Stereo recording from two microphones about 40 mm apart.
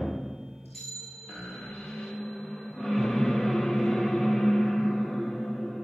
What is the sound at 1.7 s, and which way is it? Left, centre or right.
Vehicle, centre.